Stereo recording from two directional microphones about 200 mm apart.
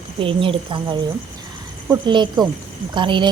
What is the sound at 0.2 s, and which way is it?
Speech, 25° right (ahead or behind).